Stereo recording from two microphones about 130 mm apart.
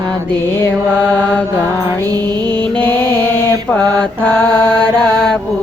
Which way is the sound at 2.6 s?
10° left (ahead or behind).